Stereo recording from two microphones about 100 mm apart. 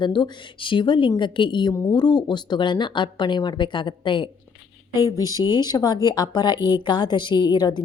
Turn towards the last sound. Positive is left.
turn(degrees=50)  # may be behind; listen again after turning